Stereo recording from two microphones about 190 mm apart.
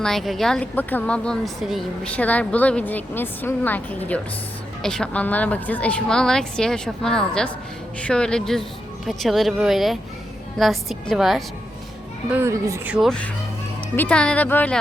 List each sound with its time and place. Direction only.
0.0 s a woman's voice: centre (ahead or behind)
12.3 s speech: 15° right (ahead or behind)
13.1 s a woman's voice: 5° left (ahead or behind)